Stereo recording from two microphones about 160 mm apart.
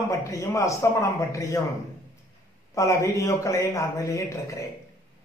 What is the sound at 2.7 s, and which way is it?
A man's voice, 20° left (ahead or behind).